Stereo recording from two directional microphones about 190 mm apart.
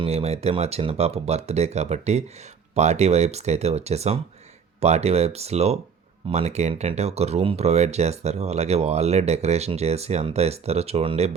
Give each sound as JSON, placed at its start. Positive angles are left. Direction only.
{"t": 0.0, "sound": "speech", "side_deg": -30}